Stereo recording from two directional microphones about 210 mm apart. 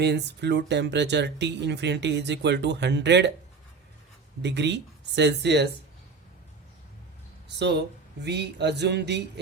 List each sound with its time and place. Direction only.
0.0 s speech: 55° right (ahead or behind)
4.4 s speech: 55° right (ahead or behind)
7.4 s speech: 55° right (ahead or behind)